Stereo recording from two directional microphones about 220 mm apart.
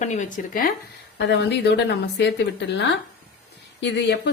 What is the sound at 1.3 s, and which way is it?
A woman's voice, 50° left (ahead or behind).